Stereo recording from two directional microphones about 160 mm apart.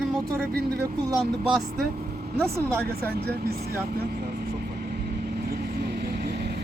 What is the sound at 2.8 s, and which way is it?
Speech, 80° right.